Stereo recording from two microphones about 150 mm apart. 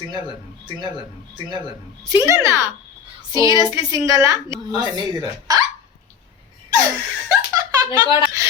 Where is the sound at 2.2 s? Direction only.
20° right (ahead or behind).